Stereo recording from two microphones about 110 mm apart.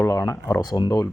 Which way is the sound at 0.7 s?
40° left (ahead or behind).